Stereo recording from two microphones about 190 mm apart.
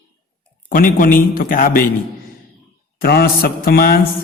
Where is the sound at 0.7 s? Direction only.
45° left (ahead or behind).